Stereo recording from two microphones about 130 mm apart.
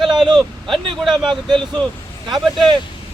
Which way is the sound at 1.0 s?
Centre (ahead or behind).